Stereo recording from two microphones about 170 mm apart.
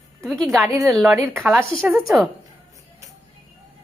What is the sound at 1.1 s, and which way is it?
Speech, 15° right (ahead or behind).